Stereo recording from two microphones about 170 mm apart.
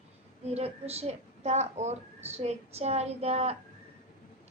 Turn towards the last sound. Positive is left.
turn(degrees=-40)  # may be behind; listen again after turning